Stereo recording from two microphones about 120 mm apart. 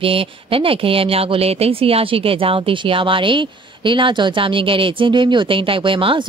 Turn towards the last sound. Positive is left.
turn(degrees=-45)  # may be behind; listen again after turning